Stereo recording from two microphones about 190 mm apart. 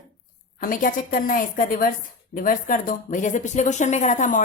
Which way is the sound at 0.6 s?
45° left (ahead or behind).